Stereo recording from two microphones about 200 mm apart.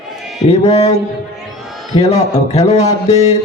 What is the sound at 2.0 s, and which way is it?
Speech, 35° left (ahead or behind).